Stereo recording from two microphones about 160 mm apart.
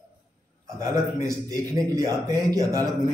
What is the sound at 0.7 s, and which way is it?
Speech, 20° right (ahead or behind).